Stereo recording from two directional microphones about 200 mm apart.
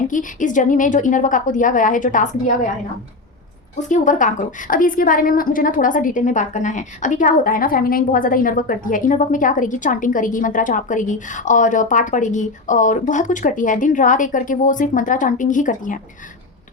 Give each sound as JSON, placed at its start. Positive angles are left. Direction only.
{"t": 0.1, "sound": "a woman's voice", "side_deg": 40}
{"t": 3.8, "sound": "a woman's voice", "side_deg": 40}